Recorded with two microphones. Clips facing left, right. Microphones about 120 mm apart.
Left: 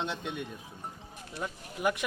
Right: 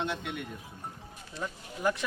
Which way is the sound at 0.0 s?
20° left (ahead or behind).